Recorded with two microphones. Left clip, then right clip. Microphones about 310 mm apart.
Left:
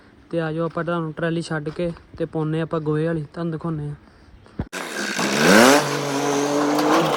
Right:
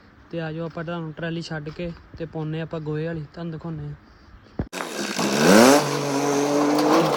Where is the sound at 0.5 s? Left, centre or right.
Left.